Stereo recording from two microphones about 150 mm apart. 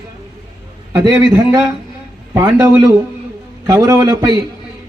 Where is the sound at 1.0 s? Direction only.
25° right (ahead or behind).